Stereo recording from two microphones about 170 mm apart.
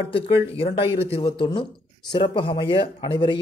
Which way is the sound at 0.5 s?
35° left (ahead or behind).